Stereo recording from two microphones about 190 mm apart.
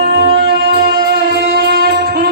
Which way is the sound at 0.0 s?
60° right (ahead or behind).